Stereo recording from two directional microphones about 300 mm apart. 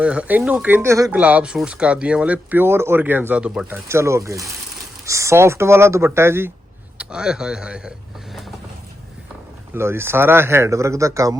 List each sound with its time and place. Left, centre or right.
0.0 s speech: centre
9.7 s speech: centre